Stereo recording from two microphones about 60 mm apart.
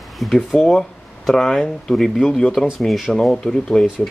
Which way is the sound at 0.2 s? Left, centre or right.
Centre.